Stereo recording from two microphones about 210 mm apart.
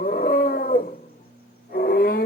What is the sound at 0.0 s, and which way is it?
Dog, 45° left (ahead or behind).